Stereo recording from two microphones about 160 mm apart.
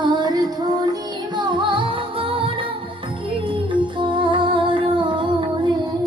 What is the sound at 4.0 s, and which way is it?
Music, 30° right (ahead or behind).